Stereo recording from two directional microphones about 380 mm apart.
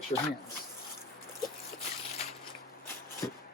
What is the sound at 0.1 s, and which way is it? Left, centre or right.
Speech, centre.